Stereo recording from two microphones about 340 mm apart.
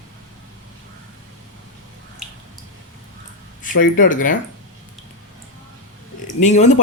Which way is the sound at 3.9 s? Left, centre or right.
Left.